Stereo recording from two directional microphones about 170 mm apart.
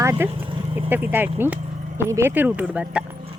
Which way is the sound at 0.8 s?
10° right (ahead or behind).